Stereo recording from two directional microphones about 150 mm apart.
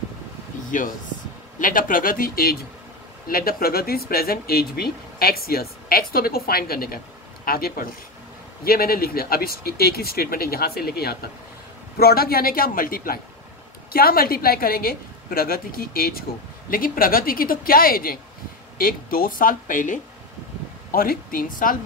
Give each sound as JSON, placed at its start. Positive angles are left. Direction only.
{"t": 0.7, "sound": "speech", "side_deg": 60}
{"t": 8.6, "sound": "speech", "side_deg": 85}
{"t": 16.7, "sound": "speech", "side_deg": 70}